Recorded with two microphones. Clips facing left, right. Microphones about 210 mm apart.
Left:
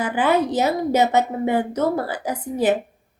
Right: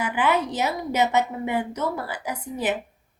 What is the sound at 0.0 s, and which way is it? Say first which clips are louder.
Speech: left 4 dB; 35° left (ahead or behind).